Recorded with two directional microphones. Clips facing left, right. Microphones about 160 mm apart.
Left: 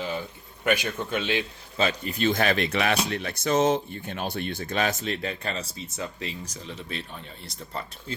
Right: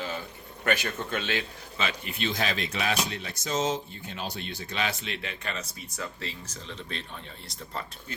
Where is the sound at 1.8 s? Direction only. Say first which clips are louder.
Left 7 dB; 40° left (ahead or behind); by 7.0 s 10° left (ahead or behind).